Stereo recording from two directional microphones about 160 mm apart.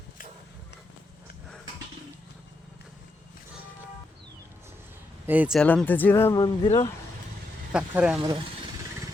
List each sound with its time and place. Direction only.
5.2 s speech: 10° right (ahead or behind)
5.5 s speech: 10° left (ahead or behind)
6.4 s speech: 30° left (ahead or behind)
7.7 s speech: 5° right (ahead or behind)